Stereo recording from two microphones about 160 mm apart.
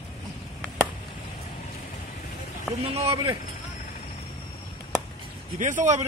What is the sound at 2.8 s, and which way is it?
Speech, 40° right (ahead or behind).